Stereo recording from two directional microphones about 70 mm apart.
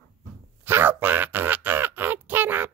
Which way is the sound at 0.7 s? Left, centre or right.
Right.